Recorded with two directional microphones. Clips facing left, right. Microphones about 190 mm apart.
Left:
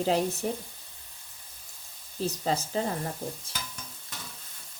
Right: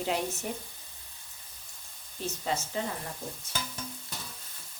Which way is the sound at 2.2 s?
35° left (ahead or behind).